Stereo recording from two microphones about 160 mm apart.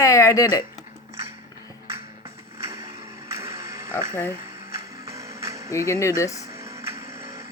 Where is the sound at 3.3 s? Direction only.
20° right (ahead or behind).